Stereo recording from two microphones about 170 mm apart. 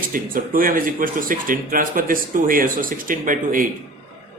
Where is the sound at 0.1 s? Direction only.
55° right (ahead or behind).